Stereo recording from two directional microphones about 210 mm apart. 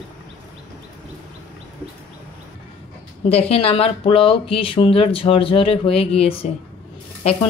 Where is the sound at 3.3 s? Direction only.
30° left (ahead or behind).